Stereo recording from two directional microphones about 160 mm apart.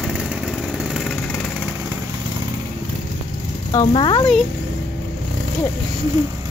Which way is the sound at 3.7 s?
30° left (ahead or behind).